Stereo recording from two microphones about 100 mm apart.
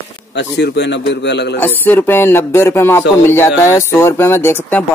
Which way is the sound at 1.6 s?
20° left (ahead or behind).